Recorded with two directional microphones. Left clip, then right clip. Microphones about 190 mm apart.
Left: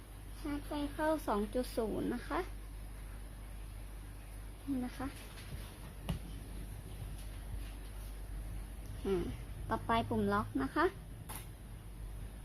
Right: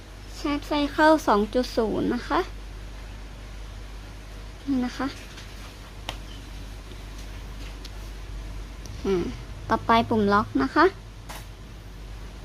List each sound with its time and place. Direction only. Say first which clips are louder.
0.4 s speech: right 15 dB; 35° right (ahead or behind); by 2.5 s 15° right (ahead or behind)
4.8 s speech: right 13 dB; 20° right (ahead or behind)
9.0 s speech: right 11 dB; 10° right (ahead or behind)